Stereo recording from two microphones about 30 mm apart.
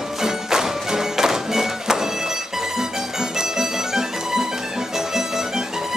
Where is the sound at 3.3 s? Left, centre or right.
Centre.